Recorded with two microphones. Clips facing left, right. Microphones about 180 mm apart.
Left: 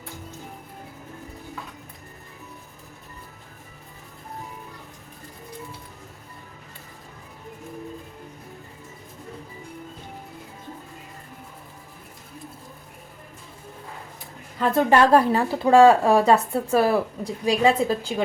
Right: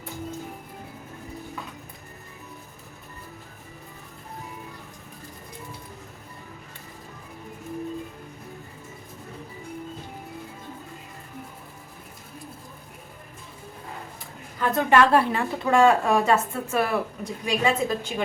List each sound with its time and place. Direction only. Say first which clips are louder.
14.6 s a woman's voice: left 2 dB; 30° left (ahead or behind)